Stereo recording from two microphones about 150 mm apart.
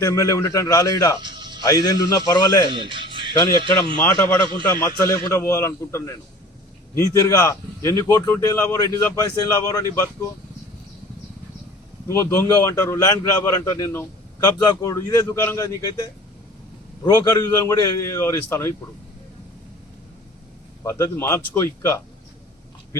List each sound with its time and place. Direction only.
0.0 s a man's voice: 20° left (ahead or behind)
1.2 s music: 30° right (ahead or behind)
1.6 s a man's voice: 30° left (ahead or behind)
2.6 s music: 35° right (ahead or behind)
3.6 s speech: 35° right (ahead or behind)
4.9 s a man's voice: 20° left (ahead or behind)
12.0 s a man's voice: 20° left (ahead or behind)
20.8 s a man's voice: 15° left (ahead or behind)